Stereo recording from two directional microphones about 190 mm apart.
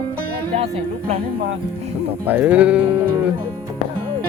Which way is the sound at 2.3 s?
10° right (ahead or behind).